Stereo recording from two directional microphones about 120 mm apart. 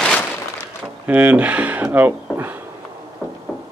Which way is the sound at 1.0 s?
15° right (ahead or behind).